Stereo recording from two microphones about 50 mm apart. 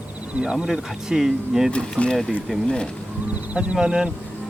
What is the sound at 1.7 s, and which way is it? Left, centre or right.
Speech, left.